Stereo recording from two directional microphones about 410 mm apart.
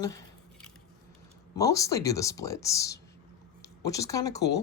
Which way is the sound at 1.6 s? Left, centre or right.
Centre.